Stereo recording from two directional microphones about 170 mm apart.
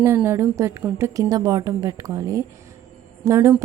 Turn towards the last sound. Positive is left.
turn(degrees=-15)  # may be behind; listen again after turning